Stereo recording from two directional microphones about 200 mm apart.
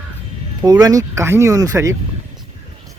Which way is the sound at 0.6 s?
20° right (ahead or behind).